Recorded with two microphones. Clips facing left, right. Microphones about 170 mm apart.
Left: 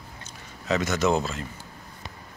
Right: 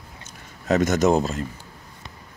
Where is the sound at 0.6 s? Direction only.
45° right (ahead or behind).